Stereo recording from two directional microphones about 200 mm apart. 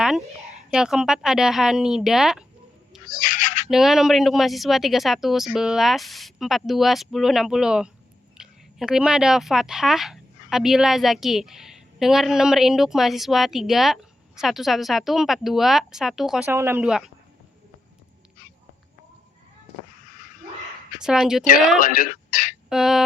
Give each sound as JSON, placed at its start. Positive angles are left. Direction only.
{"t": 0.7, "sound": "speech", "side_deg": -5}
{"t": 3.1, "sound": "owl", "side_deg": 45}
{"t": 3.7, "sound": "speech", "side_deg": 0}
{"t": 16.5, "sound": "speech", "side_deg": -10}
{"t": 21.0, "sound": "speech", "side_deg": -5}
{"t": 21.8, "sound": "speech", "side_deg": 45}
{"t": 22.7, "sound": "speech", "side_deg": 0}